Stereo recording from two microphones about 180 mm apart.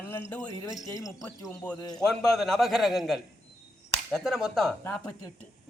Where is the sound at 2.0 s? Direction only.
Centre (ahead or behind).